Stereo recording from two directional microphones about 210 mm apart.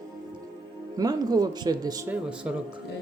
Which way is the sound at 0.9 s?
20° right (ahead or behind).